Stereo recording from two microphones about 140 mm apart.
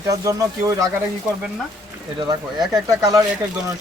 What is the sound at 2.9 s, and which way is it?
Speech, 25° right (ahead or behind).